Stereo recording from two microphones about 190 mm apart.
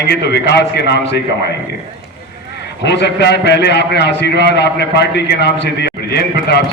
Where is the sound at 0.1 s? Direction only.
60° left (ahead or behind).